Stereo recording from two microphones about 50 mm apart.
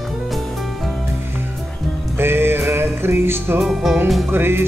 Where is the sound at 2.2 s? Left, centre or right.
Right.